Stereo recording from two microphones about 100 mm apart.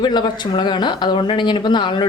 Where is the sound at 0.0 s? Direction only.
45° left (ahead or behind).